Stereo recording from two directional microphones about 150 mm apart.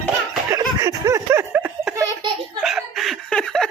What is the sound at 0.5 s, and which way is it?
Laughter, 25° right (ahead or behind).